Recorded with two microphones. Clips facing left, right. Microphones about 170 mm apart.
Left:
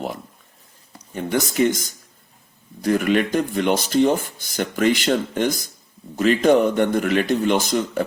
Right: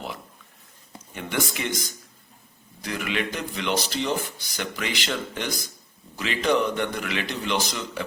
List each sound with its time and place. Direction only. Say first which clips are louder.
1.1 s speech: left 7 dB; 40° left (ahead or behind)